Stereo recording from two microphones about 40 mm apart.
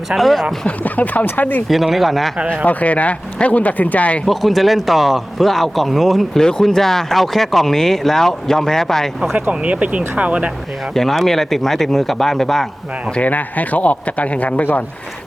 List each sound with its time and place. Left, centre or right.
0.2 s speech: centre
0.9 s speech: left
1.6 s speech: centre
2.6 s speech: left
4.3 s speech: centre
6.3 s speech: centre
9.3 s speech: right
10.9 s speech: centre
13.2 s speech: left